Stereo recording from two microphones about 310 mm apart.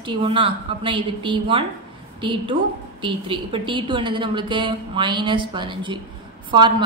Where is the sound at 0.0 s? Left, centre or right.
Centre.